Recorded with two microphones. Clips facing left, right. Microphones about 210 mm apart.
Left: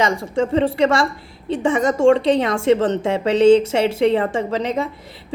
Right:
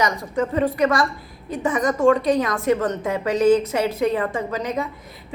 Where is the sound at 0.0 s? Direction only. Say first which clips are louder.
Left 3 dB; 30° left (ahead or behind).